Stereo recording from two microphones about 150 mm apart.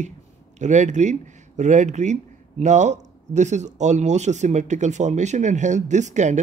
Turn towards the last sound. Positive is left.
turn(degrees=-50)  # may be behind; listen again after turning